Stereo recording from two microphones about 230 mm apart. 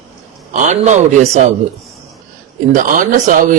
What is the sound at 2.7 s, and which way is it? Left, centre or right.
Speech, right.